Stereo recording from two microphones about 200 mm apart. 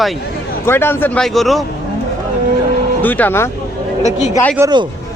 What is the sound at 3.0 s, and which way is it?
Speech, 10° left (ahead or behind).